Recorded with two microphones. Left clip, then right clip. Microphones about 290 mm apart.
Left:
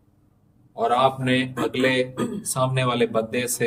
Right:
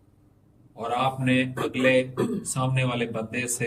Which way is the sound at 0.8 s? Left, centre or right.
Centre.